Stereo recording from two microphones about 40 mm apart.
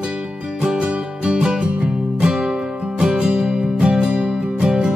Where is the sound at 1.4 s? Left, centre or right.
Right.